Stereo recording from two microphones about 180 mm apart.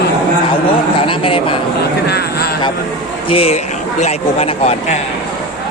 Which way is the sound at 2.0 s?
60° left (ahead or behind).